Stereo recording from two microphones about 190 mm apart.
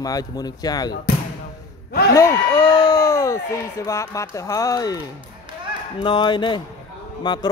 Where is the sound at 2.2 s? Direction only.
15° left (ahead or behind).